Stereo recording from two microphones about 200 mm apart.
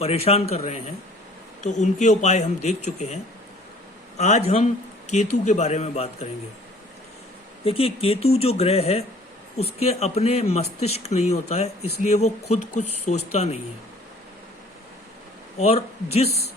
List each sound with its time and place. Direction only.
0.0 s a man's voice: 30° left (ahead or behind)
4.2 s a man's voice: 35° left (ahead or behind)
7.6 s a man's voice: 30° left (ahead or behind)
15.5 s a man's voice: 30° left (ahead or behind)